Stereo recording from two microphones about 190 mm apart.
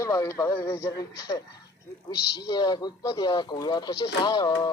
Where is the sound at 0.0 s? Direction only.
15° left (ahead or behind).